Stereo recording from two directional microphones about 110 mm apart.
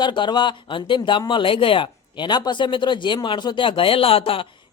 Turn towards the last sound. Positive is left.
turn(degrees=55)  # may be behind; listen again after turning